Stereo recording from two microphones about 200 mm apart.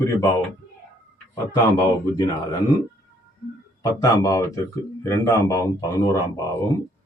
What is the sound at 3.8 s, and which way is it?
Speech, 20° left (ahead or behind).